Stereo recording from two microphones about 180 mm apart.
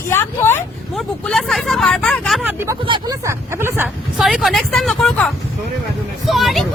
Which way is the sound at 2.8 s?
25° right (ahead or behind).